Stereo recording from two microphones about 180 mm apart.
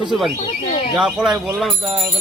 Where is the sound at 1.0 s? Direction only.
5° right (ahead or behind).